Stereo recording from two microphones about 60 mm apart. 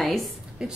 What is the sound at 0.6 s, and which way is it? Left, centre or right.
Speech, centre.